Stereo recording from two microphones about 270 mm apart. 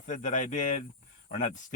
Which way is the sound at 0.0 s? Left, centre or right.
Left.